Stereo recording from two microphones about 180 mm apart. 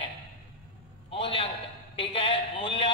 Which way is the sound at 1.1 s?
30° left (ahead or behind).